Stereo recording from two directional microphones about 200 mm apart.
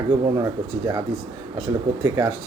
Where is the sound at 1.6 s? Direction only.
20° right (ahead or behind).